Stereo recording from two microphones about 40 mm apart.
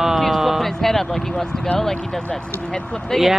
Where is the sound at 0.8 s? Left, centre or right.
Centre.